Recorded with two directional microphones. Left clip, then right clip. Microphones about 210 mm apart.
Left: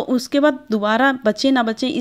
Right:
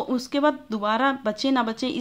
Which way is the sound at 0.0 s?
20° left (ahead or behind).